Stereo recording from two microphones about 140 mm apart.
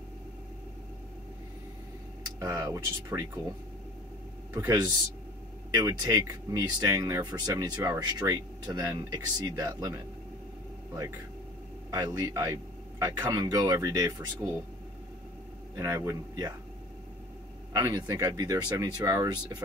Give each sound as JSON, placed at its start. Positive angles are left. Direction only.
{"t": 2.4, "sound": "speech", "side_deg": -25}
{"t": 4.6, "sound": "speech", "side_deg": -25}
{"t": 11.9, "sound": "speech", "side_deg": -25}
{"t": 15.7, "sound": "speech", "side_deg": -25}
{"t": 17.9, "sound": "speech", "side_deg": -25}